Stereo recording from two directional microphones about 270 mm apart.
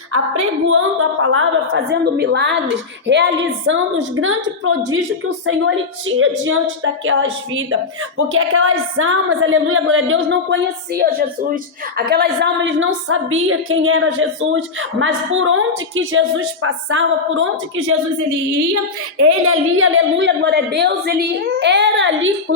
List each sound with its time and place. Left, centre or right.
0.7 s a woman's voice: right
18.3 s a woman's voice: right
19.3 s a woman's voice: right